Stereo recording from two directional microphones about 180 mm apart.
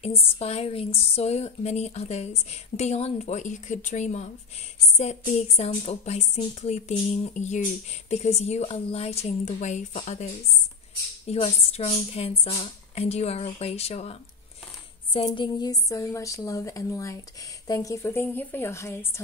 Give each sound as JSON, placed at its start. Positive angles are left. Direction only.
{"t": 0.0, "sound": "a woman's voice", "side_deg": 35}
{"t": 15.1, "sound": "a woman's voice", "side_deg": 25}